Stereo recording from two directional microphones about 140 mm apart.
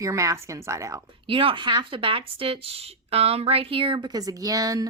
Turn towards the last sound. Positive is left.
turn(degrees=-25)  # may be behind; listen again after turning